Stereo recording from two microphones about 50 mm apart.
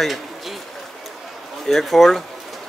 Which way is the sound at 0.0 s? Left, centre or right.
Centre.